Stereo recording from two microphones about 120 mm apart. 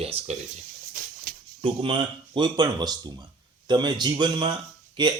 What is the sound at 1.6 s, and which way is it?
Speech, 45° right (ahead or behind).